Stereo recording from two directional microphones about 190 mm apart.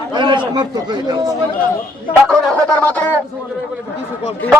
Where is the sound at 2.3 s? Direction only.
5° left (ahead or behind).